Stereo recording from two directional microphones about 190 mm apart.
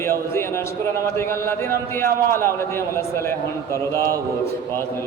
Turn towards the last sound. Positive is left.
turn(degrees=15)  # may be behind; listen again after turning